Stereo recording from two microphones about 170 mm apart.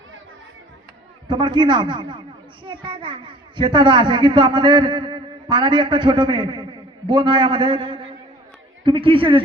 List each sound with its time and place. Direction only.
1.3 s a child's voice: 25° right (ahead or behind)